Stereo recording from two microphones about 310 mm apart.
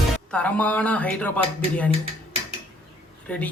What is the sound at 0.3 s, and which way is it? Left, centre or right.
Speech, centre.